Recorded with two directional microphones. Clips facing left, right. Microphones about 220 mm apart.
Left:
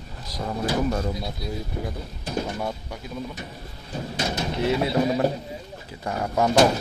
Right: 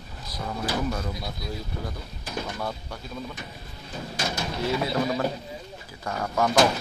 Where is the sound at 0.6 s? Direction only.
30° left (ahead or behind).